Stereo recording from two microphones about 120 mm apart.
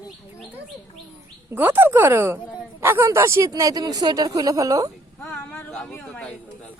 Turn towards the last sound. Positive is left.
turn(degrees=5)  # may be behind; listen again after turning